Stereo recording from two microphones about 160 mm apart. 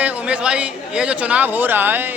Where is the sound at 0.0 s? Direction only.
10° right (ahead or behind).